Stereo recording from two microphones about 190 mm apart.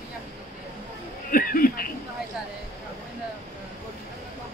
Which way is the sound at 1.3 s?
50° left (ahead or behind).